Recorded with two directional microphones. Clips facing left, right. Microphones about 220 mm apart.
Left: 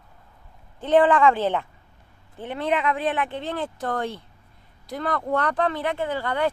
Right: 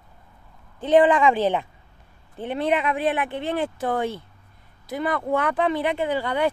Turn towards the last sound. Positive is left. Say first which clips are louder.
# right 2 dB
turn(degrees=-15)  # may be behind; listen again after turning